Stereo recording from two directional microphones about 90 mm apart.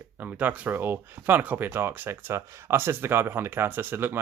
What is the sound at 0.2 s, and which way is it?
Speech, 20° right (ahead or behind).